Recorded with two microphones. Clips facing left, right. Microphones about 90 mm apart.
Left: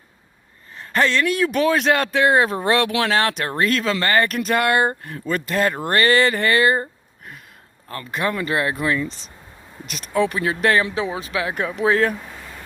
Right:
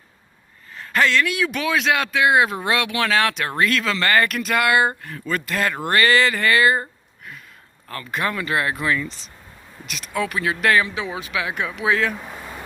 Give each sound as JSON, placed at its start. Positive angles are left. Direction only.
{"t": 0.9, "sound": "speech", "side_deg": 35}
{"t": 7.9, "sound": "speech", "side_deg": 30}
{"t": 12.2, "sound": "a sound", "side_deg": -15}